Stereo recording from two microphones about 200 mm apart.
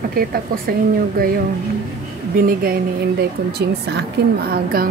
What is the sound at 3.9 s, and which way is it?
A woman's voice, 55° right (ahead or behind).